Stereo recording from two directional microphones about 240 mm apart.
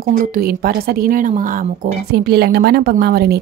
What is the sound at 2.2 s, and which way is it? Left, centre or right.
A woman's voice, right.